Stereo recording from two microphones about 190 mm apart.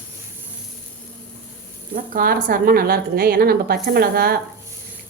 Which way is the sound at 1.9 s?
50° right (ahead or behind).